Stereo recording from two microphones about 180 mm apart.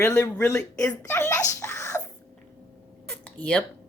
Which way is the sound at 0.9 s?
10° left (ahead or behind).